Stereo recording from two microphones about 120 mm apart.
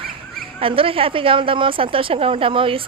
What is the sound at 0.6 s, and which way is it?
A woman's voice, 50° right (ahead or behind).